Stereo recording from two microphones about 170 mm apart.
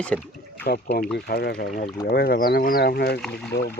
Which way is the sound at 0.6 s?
70° left (ahead or behind).